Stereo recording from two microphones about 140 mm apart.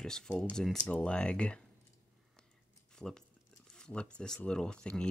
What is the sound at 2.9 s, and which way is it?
Speech, 5° left (ahead or behind).